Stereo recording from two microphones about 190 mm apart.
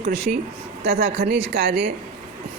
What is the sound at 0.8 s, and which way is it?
Speech, 75° right (ahead or behind).